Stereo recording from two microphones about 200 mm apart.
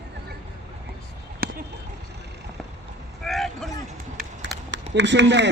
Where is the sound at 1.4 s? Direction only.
45° right (ahead or behind).